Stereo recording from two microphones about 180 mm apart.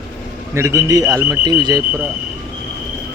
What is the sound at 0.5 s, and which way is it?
Speech, 15° right (ahead or behind).